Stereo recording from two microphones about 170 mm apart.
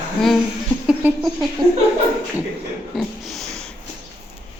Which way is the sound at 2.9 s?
Centre (ahead or behind).